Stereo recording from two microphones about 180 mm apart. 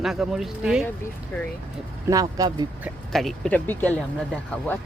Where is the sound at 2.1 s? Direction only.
20° right (ahead or behind).